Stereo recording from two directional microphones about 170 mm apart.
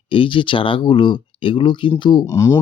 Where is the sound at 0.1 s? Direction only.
30° left (ahead or behind).